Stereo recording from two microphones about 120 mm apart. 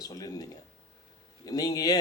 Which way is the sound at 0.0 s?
35° left (ahead or behind).